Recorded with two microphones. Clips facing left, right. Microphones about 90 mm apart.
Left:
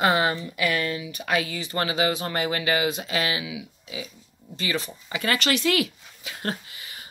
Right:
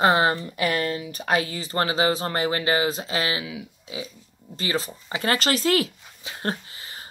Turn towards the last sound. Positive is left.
turn(degrees=-30)  # may be behind; listen again after turning